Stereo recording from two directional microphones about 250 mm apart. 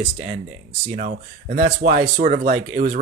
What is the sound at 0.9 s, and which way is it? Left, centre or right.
Speech, right.